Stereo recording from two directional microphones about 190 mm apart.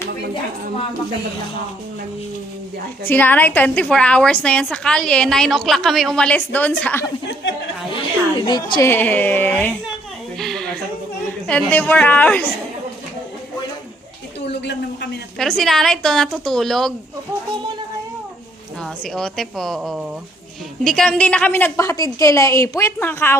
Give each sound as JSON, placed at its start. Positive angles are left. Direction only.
{"t": 3.0, "sound": "a woman's voice", "side_deg": 10}
{"t": 7.9, "sound": "a sound", "side_deg": 25}
{"t": 8.9, "sound": "a woman's voice", "side_deg": 10}
{"t": 10.3, "sound": "a sound", "side_deg": 0}
{"t": 11.4, "sound": "a woman's voice", "side_deg": 5}
{"t": 14.5, "sound": "a woman's voice", "side_deg": 65}
{"t": 15.4, "sound": "a woman's voice", "side_deg": 0}
{"t": 18.8, "sound": "a woman's voice", "side_deg": 5}